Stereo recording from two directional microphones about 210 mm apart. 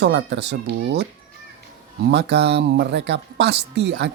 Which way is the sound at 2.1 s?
55° right (ahead or behind).